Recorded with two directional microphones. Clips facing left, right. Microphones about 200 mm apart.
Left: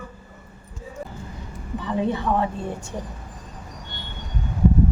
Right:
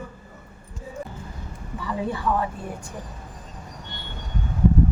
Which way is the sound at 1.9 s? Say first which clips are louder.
Left 3 dB; 25° left (ahead or behind).